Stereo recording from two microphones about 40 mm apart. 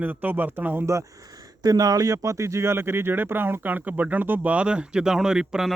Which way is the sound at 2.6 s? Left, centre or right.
Right.